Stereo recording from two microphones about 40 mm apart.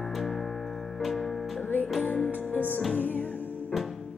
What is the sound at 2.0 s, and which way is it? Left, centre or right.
Music, left.